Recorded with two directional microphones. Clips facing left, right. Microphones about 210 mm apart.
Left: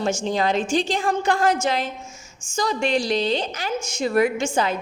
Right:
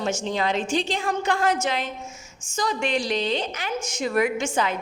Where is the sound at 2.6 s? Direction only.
30° left (ahead or behind).